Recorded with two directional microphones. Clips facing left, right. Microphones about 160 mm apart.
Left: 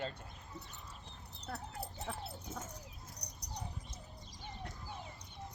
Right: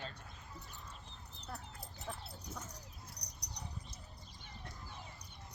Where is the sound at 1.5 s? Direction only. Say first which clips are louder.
Left 6 dB; 65° left (ahead or behind).